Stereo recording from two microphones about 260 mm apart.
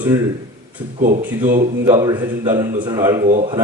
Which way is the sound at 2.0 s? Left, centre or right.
Centre.